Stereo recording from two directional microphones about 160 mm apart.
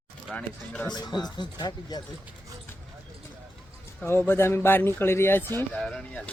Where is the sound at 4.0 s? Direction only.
15° left (ahead or behind).